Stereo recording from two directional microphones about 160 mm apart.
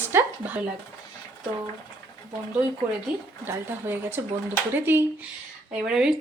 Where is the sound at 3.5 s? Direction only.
15° right (ahead or behind).